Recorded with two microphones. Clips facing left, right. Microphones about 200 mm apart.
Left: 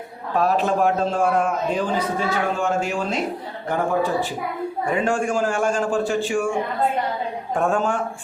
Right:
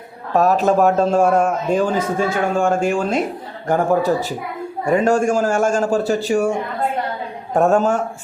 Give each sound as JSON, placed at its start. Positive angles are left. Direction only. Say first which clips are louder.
{"t": 0.3, "sound": "a man's voice", "louder": "right 5 dB", "side_deg": -45}